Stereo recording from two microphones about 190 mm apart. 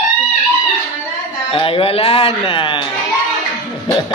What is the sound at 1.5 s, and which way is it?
Speech, 30° left (ahead or behind).